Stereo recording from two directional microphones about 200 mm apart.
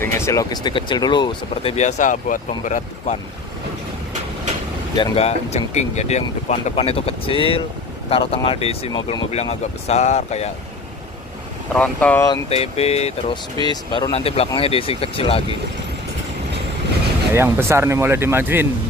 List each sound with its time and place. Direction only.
0.0 s speech: 15° left (ahead or behind); by 3.2 s 40° left (ahead or behind)
4.9 s speech: 25° left (ahead or behind)
11.7 s speech: 5° left (ahead or behind)
12.4 s speech: 30° left (ahead or behind)
17.3 s speech: 10° right (ahead or behind)